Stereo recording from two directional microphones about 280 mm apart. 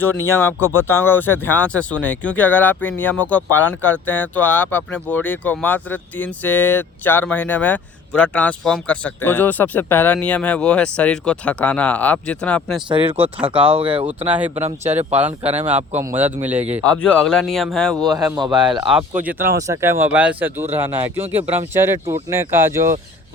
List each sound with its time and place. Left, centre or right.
0.3 s speech: centre
12.9 s speech: centre
14.3 s speech: centre
14.5 s speech: right
15.2 s speech: centre
17.9 s speech: centre